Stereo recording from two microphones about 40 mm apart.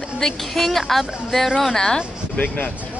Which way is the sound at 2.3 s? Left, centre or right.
Left.